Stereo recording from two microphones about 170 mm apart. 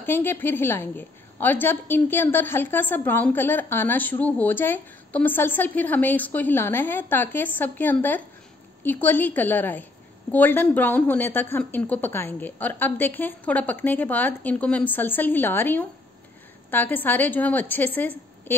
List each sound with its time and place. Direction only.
0.0 s a woman's voice: 10° left (ahead or behind)